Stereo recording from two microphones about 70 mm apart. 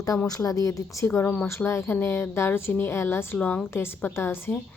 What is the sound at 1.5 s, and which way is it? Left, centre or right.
A woman's voice, left.